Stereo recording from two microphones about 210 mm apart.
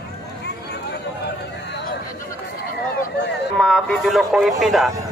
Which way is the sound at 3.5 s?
Centre (ahead or behind).